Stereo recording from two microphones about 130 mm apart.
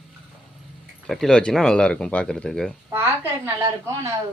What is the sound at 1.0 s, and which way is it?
Speech, 5° left (ahead or behind).